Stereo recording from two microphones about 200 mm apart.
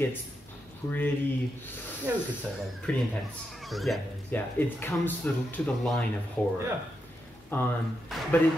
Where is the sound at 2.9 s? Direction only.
5° left (ahead or behind).